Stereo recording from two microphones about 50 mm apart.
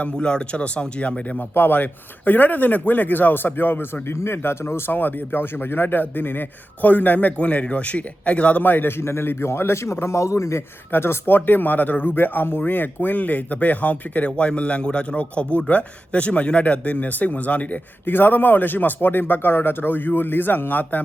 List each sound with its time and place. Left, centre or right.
0.0 s speech: centre
1.4 s speech: left
4.0 s speech: left
8.6 s a man's voice: left
10.9 s speech: left
11.3 s speech: left